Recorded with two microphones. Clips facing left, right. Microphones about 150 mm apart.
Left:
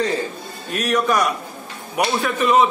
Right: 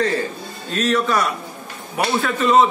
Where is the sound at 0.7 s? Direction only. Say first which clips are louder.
Even; 15° left (ahead or behind).